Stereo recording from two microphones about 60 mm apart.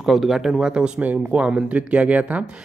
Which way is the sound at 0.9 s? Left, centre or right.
Right.